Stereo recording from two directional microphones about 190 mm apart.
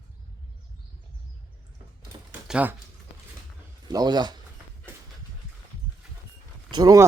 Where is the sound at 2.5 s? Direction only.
5° right (ahead or behind).